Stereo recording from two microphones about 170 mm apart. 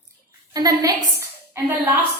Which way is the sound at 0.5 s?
20° right (ahead or behind).